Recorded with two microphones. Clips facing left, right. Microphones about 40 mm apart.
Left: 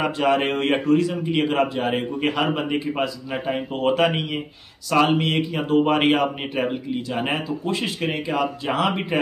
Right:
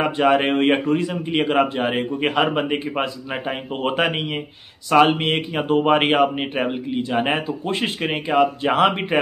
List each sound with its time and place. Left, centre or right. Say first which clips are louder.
0.0 s a man's voice: right 3 dB; right
5.0 s speech: right 2 dB; right